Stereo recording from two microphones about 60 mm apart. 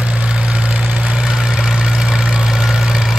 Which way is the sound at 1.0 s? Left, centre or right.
Centre.